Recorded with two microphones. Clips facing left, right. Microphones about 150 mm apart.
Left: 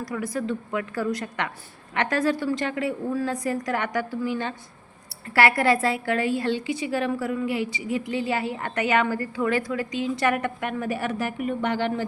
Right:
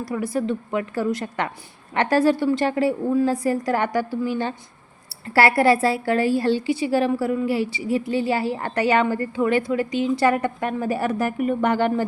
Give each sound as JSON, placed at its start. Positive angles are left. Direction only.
{"t": 0.0, "sound": "a woman's voice", "side_deg": -25}